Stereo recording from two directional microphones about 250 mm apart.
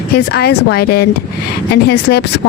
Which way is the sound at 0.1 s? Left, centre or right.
Left.